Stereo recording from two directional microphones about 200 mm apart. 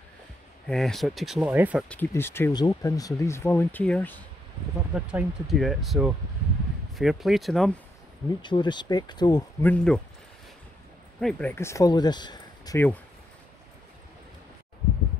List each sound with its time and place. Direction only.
0.7 s speech: centre (ahead or behind)
1.9 s speech: 10° left (ahead or behind)
4.9 s speech: 5° right (ahead or behind)
8.4 s speech: 20° left (ahead or behind)
9.6 s speech: 10° left (ahead or behind)
11.1 s speech: 5° left (ahead or behind)